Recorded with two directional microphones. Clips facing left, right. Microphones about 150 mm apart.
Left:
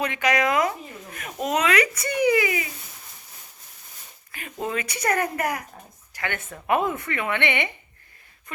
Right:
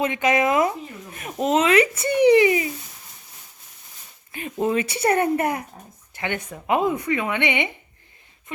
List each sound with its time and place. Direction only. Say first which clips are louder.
0.0 s a woman's voice: right 3 dB; 25° right (ahead or behind)
4.3 s a woman's voice: right 7 dB; 20° right (ahead or behind)